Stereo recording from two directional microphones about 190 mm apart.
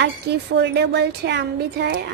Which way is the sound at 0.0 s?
65° right (ahead or behind).